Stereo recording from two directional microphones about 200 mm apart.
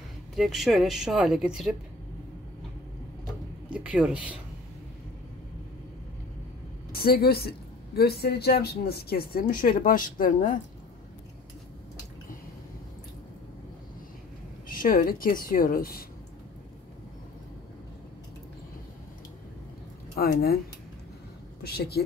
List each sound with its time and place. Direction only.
0.4 s speech: centre (ahead or behind)
3.7 s speech: 5° right (ahead or behind)
6.9 s speech: 50° left (ahead or behind)
14.7 s speech: 45° left (ahead or behind)
21.6 s speech: 50° left (ahead or behind)